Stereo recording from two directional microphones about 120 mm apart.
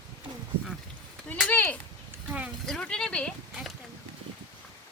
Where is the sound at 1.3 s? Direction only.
15° left (ahead or behind).